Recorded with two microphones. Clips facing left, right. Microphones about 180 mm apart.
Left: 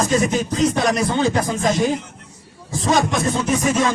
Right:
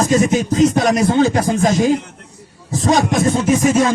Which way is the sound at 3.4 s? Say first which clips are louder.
Right 4 dB; 45° right (ahead or behind).